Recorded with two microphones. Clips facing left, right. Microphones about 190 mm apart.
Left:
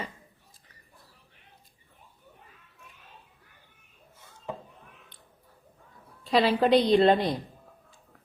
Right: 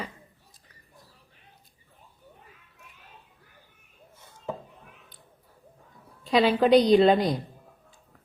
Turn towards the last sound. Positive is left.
turn(degrees=0)  # may be behind; listen again after turning